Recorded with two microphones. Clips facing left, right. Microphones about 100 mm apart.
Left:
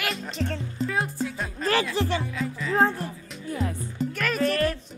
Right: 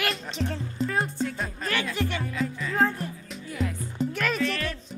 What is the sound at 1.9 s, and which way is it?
Speech, 30° left (ahead or behind).